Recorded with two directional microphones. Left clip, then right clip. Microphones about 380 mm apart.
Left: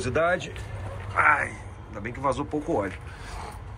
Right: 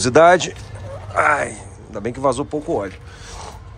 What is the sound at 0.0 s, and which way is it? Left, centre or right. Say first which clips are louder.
Speech: right 13 dB; centre.